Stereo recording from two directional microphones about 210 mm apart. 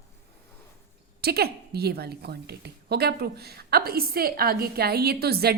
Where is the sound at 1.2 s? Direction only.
50° right (ahead or behind).